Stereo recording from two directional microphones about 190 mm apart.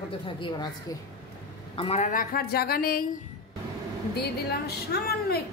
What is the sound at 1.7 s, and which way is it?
A woman's voice, 30° left (ahead or behind).